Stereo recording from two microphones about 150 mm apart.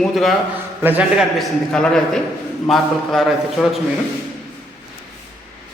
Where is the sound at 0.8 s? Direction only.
10° right (ahead or behind).